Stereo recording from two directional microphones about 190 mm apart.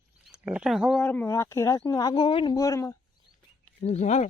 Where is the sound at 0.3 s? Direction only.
5° right (ahead or behind); by 3.0 s 15° left (ahead or behind).